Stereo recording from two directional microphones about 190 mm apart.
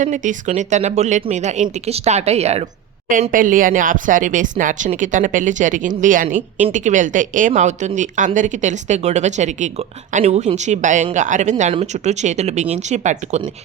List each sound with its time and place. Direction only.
0.0 s speech: 40° right (ahead or behind)